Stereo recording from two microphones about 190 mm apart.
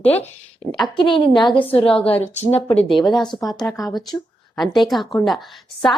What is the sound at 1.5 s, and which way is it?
Speech, 10° left (ahead or behind).